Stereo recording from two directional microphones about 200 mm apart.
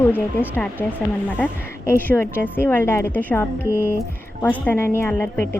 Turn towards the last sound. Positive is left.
turn(degrees=10)  # may be behind; listen again after turning